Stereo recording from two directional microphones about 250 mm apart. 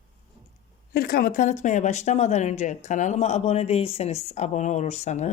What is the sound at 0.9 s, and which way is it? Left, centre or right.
Speech, left.